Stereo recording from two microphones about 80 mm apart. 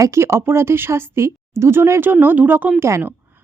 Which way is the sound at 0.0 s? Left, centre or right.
Right.